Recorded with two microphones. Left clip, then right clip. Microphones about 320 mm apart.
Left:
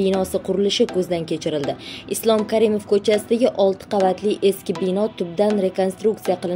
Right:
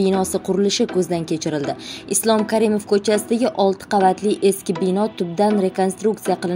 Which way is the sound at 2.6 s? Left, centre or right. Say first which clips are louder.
Even; right.